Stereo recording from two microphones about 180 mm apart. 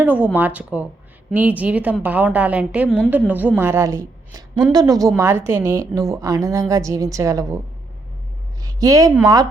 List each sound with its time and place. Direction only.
0.0 s a woman's voice: 10° right (ahead or behind)
8.8 s a woman's voice: 20° right (ahead or behind)